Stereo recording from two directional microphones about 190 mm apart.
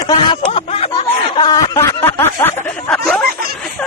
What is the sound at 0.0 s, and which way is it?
Snicker, 25° left (ahead or behind).